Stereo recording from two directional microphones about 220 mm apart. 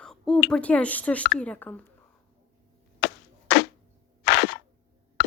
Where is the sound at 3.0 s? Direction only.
55° left (ahead or behind).